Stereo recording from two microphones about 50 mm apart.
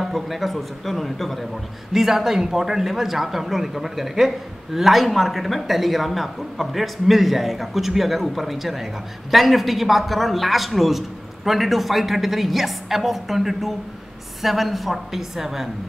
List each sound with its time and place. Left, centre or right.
0.0 s a man's voice: centre
1.9 s a man's voice: centre